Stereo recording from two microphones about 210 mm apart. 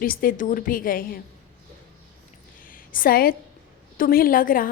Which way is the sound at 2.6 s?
40° left (ahead or behind).